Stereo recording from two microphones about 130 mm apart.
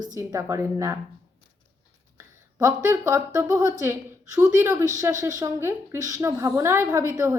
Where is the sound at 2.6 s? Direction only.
20° right (ahead or behind).